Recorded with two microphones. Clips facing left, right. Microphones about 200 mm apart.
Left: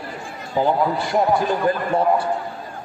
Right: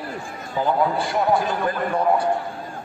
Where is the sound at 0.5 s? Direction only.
20° left (ahead or behind).